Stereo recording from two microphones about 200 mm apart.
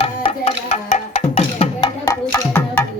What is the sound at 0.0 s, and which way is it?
Music, 30° left (ahead or behind).